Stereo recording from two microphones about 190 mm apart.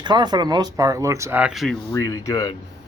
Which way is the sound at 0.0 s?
25° right (ahead or behind).